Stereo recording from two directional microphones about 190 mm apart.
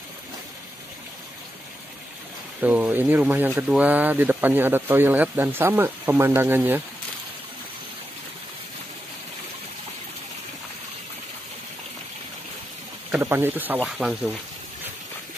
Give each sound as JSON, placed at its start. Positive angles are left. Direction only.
{"t": 2.6, "sound": "speech", "side_deg": -10}
{"t": 13.2, "sound": "speech", "side_deg": -10}